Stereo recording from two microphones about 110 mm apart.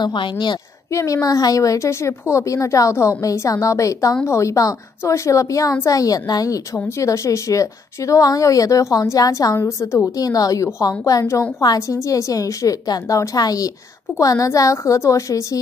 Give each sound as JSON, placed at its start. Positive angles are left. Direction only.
{"t": 0.0, "sound": "a woman's voice", "side_deg": 45}
{"t": 0.9, "sound": "a woman's voice", "side_deg": 30}